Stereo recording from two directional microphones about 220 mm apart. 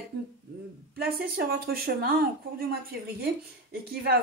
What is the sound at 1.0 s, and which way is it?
Speech, 45° right (ahead or behind).